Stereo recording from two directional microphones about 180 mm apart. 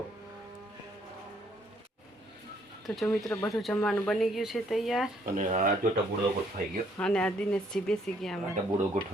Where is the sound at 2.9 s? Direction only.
5° left (ahead or behind).